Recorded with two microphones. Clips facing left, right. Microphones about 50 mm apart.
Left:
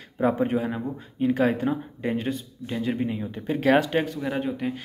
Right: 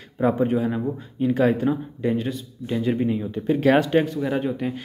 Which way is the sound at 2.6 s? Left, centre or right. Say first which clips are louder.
Right 4 dB; centre.